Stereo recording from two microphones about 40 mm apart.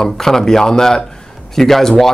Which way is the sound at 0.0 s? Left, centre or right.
Centre.